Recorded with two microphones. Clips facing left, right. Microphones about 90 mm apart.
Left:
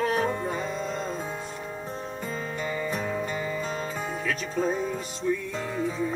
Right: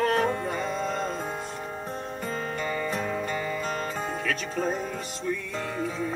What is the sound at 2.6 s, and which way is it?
Music, 15° left (ahead or behind).